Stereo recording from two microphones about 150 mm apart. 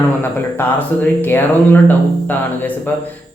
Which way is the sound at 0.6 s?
15° left (ahead or behind).